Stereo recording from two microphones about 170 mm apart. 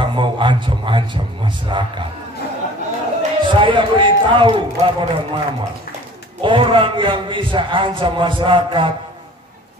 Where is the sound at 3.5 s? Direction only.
30° right (ahead or behind).